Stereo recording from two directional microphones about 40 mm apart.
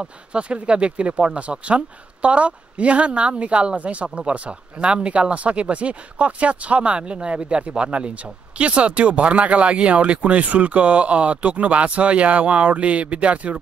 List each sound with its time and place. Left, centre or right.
0.3 s speech: right